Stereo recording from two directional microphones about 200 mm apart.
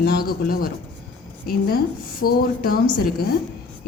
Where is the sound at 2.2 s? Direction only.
50° left (ahead or behind).